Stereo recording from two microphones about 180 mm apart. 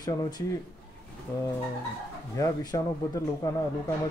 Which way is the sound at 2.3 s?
20° left (ahead or behind).